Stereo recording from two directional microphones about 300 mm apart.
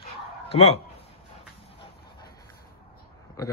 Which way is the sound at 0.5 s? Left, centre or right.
Centre.